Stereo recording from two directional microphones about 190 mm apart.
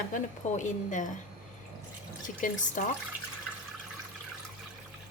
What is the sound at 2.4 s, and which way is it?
Speech, 40° left (ahead or behind).